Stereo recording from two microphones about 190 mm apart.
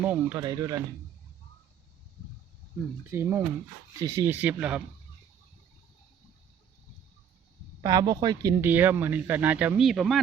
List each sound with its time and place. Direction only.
0.0 s speech: 10° right (ahead or behind)
0.3 s speech: 20° right (ahead or behind)
3.1 s speech: 10° right (ahead or behind)
7.8 s speech: 20° right (ahead or behind); by 10.2 s centre (ahead or behind)